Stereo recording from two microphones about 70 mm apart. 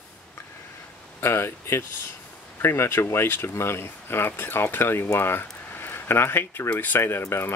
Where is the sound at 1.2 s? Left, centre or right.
Left.